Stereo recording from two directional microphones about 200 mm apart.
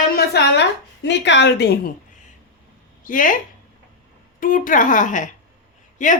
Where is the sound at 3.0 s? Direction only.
40° left (ahead or behind).